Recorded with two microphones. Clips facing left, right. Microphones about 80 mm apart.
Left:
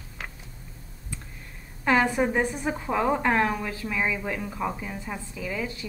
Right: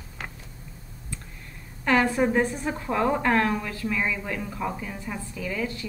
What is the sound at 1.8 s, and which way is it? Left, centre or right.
A woman's voice, centre.